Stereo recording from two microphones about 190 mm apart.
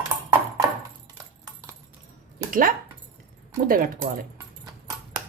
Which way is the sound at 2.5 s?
50° right (ahead or behind).